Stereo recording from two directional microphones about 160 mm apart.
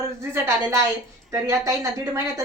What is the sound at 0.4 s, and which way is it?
A woman's voice, 20° right (ahead or behind).